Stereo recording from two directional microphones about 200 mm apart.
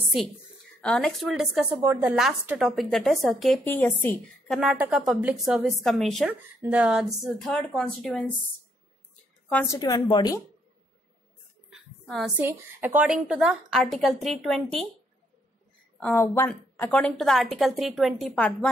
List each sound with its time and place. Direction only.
0.7 s a woman's voice: 5° left (ahead or behind)
4.6 s a woman's voice: 5° right (ahead or behind)
9.5 s a woman's voice: 10° left (ahead or behind)
9.8 s speech: 20° left (ahead or behind)
11.7 s a sound: centre (ahead or behind)
12.4 s a woman's voice: 10° right (ahead or behind)
16.0 s a woman's voice: 10° left (ahead or behind)